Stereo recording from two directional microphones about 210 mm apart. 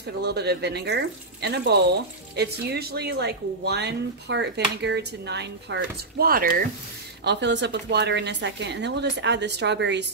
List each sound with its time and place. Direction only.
0.0 s speech: 50° right (ahead or behind)
7.2 s speech: 55° right (ahead or behind)